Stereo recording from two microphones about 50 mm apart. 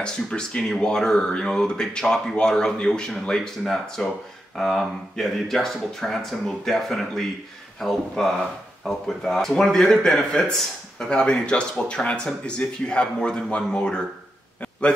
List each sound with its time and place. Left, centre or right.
0.0 s speech: centre